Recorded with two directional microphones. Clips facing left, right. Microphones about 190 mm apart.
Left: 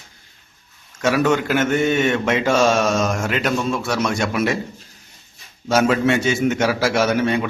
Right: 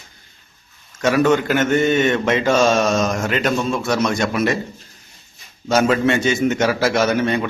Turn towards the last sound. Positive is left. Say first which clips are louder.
# even
turn(degrees=5)  # may be behind; listen again after turning